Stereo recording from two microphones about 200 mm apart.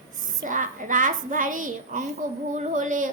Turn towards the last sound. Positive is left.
turn(degrees=-40)  # may be behind; listen again after turning